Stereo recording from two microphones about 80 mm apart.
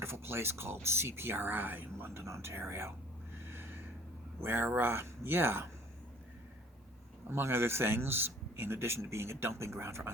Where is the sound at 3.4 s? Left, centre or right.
Right.